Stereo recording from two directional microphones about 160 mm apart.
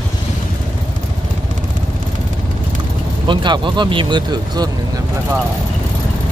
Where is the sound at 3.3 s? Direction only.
30° right (ahead or behind).